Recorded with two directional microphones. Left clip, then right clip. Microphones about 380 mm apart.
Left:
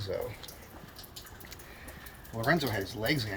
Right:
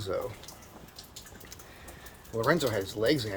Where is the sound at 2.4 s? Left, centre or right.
Centre.